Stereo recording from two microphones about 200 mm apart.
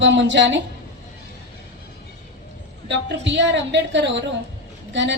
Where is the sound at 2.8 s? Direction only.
60° right (ahead or behind).